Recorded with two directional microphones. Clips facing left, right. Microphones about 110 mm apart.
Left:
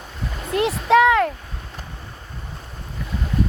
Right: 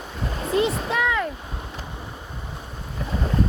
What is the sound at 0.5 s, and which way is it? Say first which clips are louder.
Speech: left 6 dB; 85° left.